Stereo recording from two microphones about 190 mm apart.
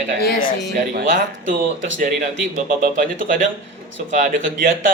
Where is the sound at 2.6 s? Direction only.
45° right (ahead or behind).